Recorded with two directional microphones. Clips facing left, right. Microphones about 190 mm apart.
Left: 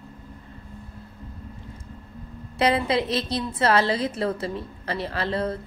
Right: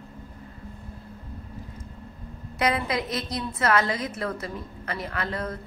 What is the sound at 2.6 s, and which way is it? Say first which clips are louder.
A woman's voice: left 4 dB; 30° left (ahead or behind).